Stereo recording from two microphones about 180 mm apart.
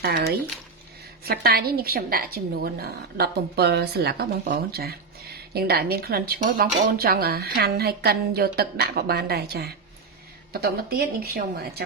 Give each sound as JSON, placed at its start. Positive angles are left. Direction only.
{"t": 1.2, "sound": "speech", "side_deg": -60}